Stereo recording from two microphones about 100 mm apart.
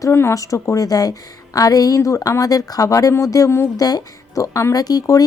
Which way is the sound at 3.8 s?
40° left (ahead or behind).